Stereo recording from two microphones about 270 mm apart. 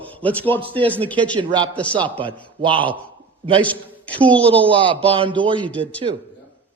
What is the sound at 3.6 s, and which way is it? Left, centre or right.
Speech, centre.